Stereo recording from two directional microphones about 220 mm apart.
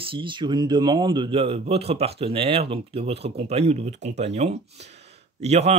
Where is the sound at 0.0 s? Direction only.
25° right (ahead or behind).